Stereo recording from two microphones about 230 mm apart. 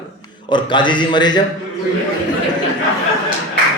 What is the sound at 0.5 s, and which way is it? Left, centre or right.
Speech, centre.